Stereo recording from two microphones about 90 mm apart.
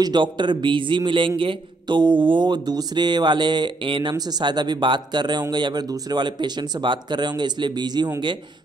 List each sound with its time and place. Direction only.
0.0 s a man's voice: 55° right (ahead or behind)
4.1 s a man's voice: 45° right (ahead or behind)